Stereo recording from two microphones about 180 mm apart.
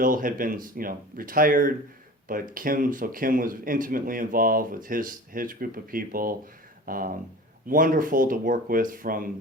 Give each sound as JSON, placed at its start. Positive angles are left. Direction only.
{"t": 0.0, "sound": "speech", "side_deg": -50}